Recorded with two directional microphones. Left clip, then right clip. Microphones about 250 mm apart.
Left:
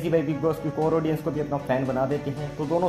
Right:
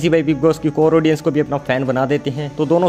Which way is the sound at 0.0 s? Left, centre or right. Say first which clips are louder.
Right 9 dB; right.